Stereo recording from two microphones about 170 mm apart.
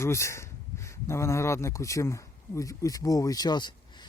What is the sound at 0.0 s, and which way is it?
Speech, 15° left (ahead or behind).